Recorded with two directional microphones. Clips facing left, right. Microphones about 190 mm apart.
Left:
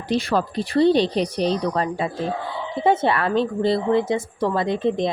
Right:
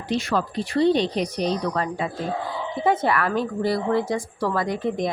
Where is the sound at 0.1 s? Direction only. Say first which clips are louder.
Left 3 dB; 35° left (ahead or behind).